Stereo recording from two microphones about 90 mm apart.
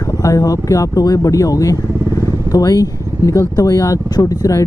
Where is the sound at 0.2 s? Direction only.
40° left (ahead or behind).